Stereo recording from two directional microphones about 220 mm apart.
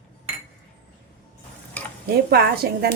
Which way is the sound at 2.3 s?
45° right (ahead or behind).